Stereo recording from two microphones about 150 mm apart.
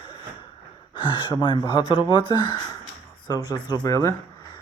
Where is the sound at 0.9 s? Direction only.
30° left (ahead or behind).